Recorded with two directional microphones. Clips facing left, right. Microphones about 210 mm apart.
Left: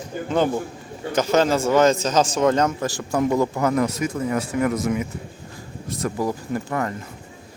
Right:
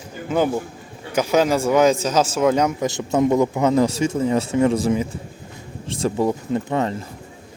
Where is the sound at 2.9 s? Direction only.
20° right (ahead or behind).